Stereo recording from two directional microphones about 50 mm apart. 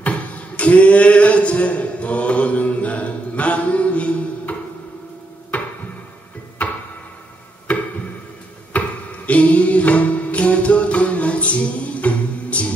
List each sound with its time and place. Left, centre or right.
0.0 s speech: left
5.5 s a sound: left
6.6 s tick-tock: left
8.7 s music: left